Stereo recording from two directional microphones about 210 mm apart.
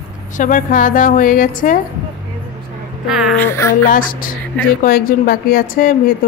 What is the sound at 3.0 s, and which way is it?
Speech, centre (ahead or behind).